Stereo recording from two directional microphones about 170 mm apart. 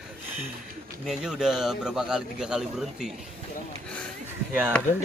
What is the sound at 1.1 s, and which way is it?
A man's voice, 5° right (ahead or behind).